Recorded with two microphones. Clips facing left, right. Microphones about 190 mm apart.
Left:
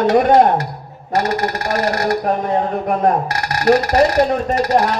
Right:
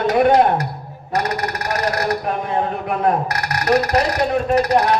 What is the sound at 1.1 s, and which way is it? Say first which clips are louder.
Speech: left 4 dB; 25° left (ahead or behind).